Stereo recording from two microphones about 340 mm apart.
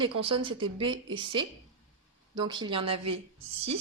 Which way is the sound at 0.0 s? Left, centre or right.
Centre.